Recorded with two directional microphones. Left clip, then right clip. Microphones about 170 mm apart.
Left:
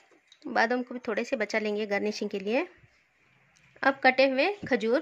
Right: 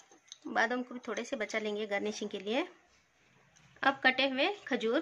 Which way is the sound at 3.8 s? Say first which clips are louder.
Left 6 dB; 40° left (ahead or behind).